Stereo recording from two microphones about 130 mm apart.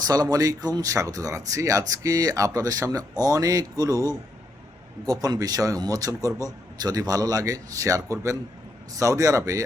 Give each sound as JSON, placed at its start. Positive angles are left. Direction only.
{"t": 0.0, "sound": "a man's voice", "side_deg": -30}